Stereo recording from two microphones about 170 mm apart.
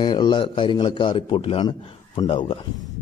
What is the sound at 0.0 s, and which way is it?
A man's voice, 25° left (ahead or behind).